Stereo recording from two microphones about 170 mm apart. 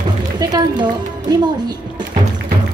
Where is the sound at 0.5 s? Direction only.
25° right (ahead or behind).